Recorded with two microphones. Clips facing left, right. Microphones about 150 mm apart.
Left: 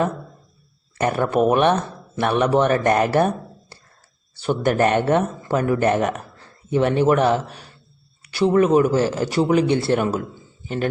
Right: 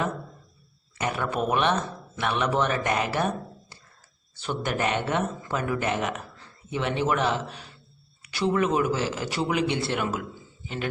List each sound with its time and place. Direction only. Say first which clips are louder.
0.9 s speech: left 9 dB; 45° left (ahead or behind)